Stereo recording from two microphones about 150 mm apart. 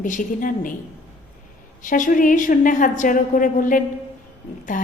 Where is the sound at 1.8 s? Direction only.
60° left (ahead or behind).